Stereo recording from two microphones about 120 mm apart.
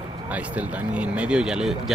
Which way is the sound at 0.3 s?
10° right (ahead or behind).